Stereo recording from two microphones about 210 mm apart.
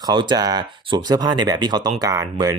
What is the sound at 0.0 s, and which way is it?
Speech, 20° right (ahead or behind).